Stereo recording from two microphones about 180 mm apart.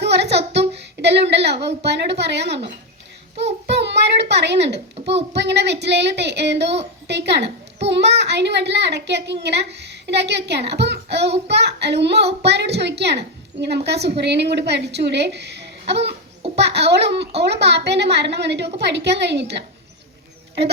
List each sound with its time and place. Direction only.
0.0 s child singing: 70° right (ahead or behind)
0.8 s a sound: 70° right (ahead or behind)
1.6 s a child's voice: 70° right (ahead or behind)
3.7 s a child's voice: 70° right (ahead or behind)
16.0 s a sound: 35° right (ahead or behind)
16.6 s a child's voice: 70° right (ahead or behind)